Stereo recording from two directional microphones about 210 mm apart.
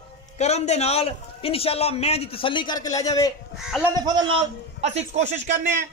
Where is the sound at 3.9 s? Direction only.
20° right (ahead or behind).